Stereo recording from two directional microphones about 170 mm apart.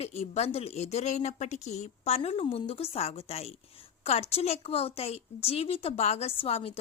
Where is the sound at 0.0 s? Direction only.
35° left (ahead or behind).